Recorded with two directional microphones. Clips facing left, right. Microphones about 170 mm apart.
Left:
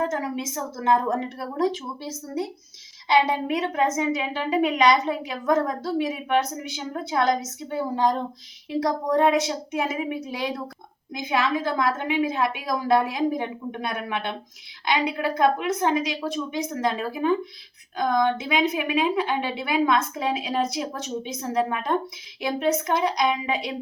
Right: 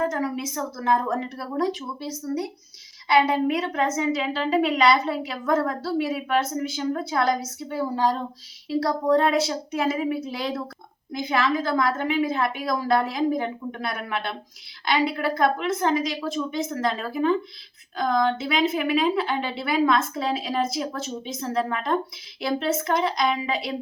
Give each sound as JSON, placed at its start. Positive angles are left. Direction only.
{"t": 0.1, "sound": "a woman's voice", "side_deg": 20}